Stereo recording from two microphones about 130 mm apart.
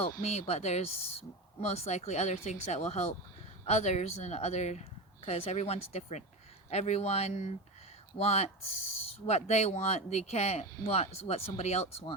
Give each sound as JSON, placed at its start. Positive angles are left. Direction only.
{"t": 0.2, "sound": "speech", "side_deg": 55}